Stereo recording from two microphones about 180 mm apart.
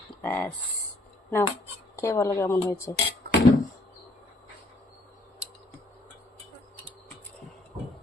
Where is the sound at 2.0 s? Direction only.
15° left (ahead or behind).